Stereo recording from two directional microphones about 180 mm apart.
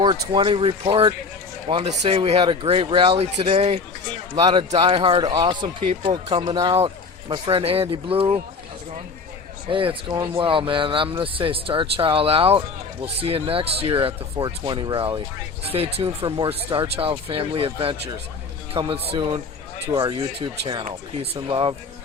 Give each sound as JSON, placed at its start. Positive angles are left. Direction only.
{"t": 0.0, "sound": "speech", "side_deg": -25}
{"t": 4.4, "sound": "speech", "side_deg": -25}
{"t": 5.6, "sound": "speech", "side_deg": -35}
{"t": 9.6, "sound": "a man's voice", "side_deg": -30}